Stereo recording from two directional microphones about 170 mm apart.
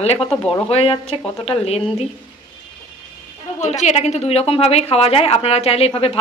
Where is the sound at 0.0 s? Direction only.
35° left (ahead or behind).